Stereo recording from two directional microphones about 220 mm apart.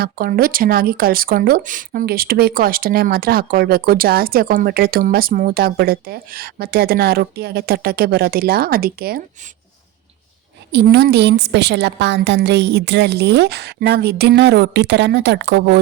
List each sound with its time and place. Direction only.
0.0 s speech: 40° right (ahead or behind)
10.7 s speech: 50° right (ahead or behind)